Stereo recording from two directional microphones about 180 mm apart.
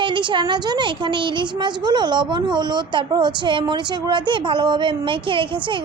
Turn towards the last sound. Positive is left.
turn(degrees=-25)  # may be behind; listen again after turning